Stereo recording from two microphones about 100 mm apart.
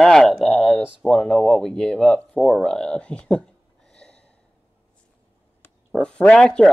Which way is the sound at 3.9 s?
10° left (ahead or behind).